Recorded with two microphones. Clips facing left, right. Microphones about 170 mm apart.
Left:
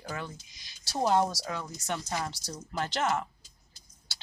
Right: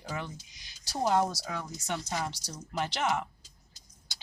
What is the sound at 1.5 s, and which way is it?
Speech, 10° right (ahead or behind).